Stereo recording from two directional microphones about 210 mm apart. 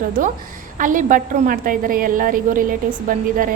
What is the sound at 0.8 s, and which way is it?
A woman's voice, 40° right (ahead or behind).